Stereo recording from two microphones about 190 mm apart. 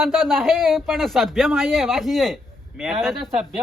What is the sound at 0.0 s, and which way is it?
Speech, centre (ahead or behind).